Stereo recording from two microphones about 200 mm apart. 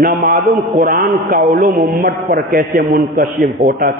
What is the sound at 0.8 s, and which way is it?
A man's voice, 40° right (ahead or behind).